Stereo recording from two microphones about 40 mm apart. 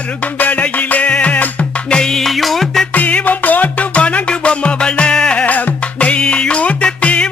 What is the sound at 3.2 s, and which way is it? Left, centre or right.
Music, left.